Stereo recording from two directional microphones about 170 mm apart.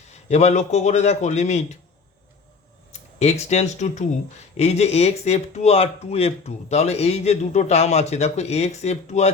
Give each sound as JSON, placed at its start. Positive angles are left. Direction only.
{"t": 0.1, "sound": "speech", "side_deg": 40}
{"t": 3.2, "sound": "speech", "side_deg": 40}